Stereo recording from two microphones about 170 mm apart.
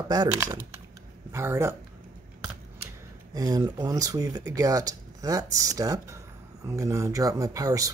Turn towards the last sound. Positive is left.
turn(degrees=-20)  # may be behind; listen again after turning